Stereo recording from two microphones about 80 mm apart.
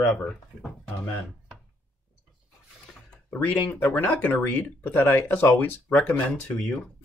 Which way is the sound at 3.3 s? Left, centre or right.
Left.